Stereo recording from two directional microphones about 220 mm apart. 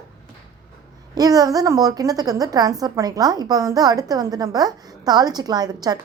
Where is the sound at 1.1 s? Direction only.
15° right (ahead or behind).